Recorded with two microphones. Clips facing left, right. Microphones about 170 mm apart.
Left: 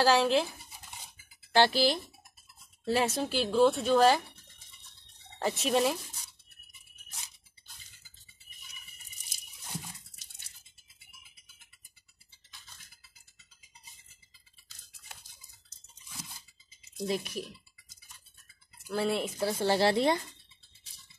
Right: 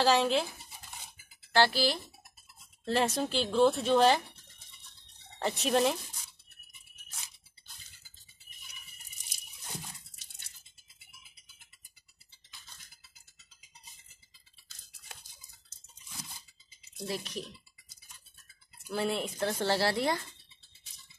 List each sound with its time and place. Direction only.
0.0 s speech: centre (ahead or behind)
1.5 s speech: 15° left (ahead or behind)
2.8 s speech: 5° left (ahead or behind)
5.4 s speech: centre (ahead or behind)
17.0 s speech: 15° left (ahead or behind)
18.9 s speech: centre (ahead or behind)
19.6 s speech: 15° left (ahead or behind)